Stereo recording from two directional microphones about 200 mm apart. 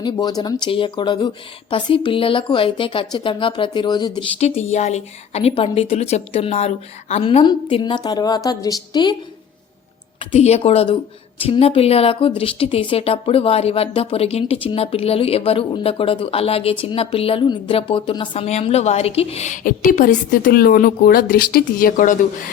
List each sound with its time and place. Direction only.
0.0 s a woman's voice: 20° left (ahead or behind)
4.4 s a woman's voice: 35° left (ahead or behind)
10.2 s a woman's voice: 30° left (ahead or behind)